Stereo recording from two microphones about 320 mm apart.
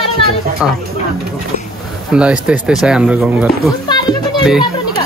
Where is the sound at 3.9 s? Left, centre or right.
Centre.